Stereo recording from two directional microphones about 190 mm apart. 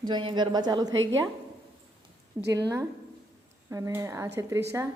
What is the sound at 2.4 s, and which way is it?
Speech, 10° right (ahead or behind).